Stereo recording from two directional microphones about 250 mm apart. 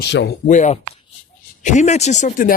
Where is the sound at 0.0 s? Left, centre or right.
Left.